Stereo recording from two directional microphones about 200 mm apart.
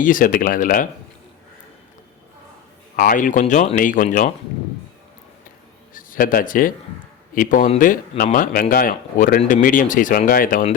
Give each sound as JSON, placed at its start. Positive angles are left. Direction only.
{"t": 0.0, "sound": "speech", "side_deg": 45}
{"t": 2.9, "sound": "speech", "side_deg": 45}
{"t": 5.9, "sound": "speech", "side_deg": 45}